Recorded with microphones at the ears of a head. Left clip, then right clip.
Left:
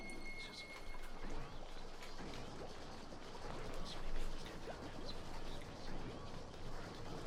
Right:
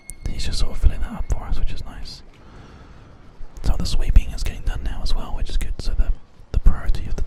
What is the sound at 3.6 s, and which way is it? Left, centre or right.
Whispering, right.